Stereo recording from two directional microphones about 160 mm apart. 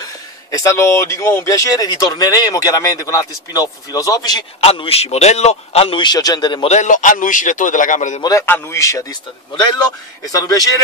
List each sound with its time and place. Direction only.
0.5 s speech: 20° left (ahead or behind)
4.6 s a man's voice: 35° left (ahead or behind)
6.7 s a man's voice: 50° left (ahead or behind)
8.2 s a man's voice: 20° left (ahead or behind)
10.3 s speech: 20° left (ahead or behind)